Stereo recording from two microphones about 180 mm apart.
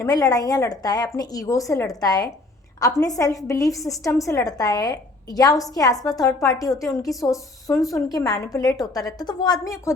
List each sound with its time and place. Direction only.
0.0 s a woman's voice: 20° left (ahead or behind)